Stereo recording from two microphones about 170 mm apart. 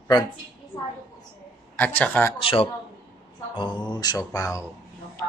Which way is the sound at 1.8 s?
10° left (ahead or behind).